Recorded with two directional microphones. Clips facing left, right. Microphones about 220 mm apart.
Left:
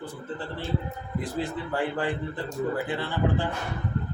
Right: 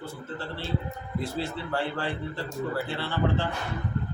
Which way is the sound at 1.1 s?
15° left (ahead or behind).